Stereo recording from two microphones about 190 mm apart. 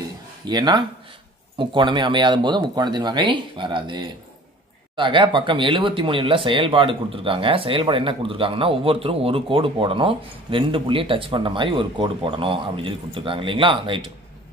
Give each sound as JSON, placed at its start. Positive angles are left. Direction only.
{"t": 0.5, "sound": "speech", "side_deg": -20}